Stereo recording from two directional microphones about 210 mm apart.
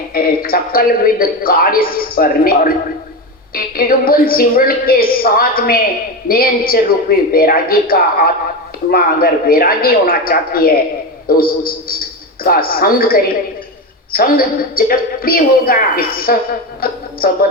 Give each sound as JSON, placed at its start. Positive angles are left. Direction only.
{"t": 0.1, "sound": "a man's voice", "side_deg": 45}
{"t": 16.8, "sound": "music", "side_deg": 45}